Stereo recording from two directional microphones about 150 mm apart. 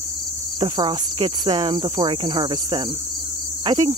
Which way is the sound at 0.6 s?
30° right (ahead or behind).